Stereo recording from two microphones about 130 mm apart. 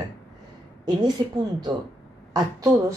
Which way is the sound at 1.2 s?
30° right (ahead or behind).